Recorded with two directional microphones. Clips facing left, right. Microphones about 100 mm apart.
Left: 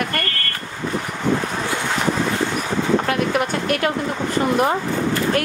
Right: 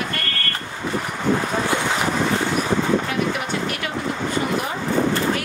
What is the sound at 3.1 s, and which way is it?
Speech, 55° left (ahead or behind).